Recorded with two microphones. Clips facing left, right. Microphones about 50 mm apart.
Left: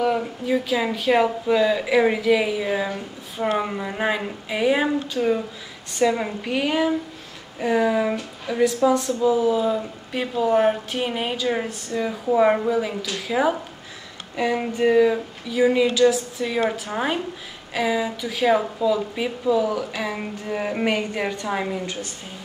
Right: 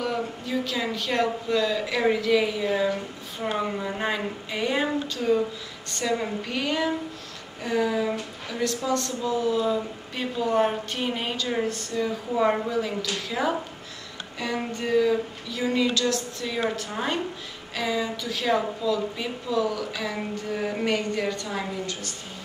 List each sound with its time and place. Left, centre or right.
0.0 s speech: centre